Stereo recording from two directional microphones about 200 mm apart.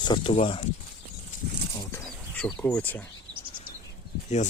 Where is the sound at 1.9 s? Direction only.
10° left (ahead or behind).